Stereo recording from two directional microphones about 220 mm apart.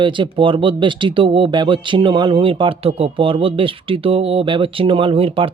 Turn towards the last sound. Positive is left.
turn(degrees=-25)  # may be behind; listen again after turning